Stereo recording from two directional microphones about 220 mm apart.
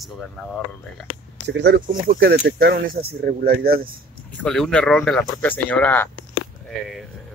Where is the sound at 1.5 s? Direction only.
50° right (ahead or behind).